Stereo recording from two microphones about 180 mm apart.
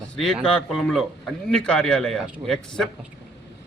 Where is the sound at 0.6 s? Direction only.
Centre (ahead or behind).